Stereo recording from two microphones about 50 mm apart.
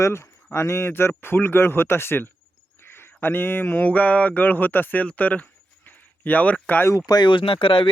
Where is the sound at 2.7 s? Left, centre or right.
Left.